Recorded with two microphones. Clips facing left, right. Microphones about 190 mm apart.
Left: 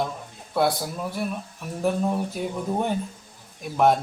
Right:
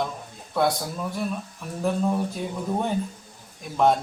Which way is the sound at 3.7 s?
5° left (ahead or behind).